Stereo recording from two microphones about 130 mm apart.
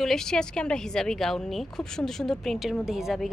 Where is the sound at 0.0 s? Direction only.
5° left (ahead or behind).